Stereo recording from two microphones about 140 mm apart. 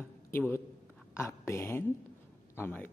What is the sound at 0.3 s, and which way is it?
A man's voice, 15° left (ahead or behind).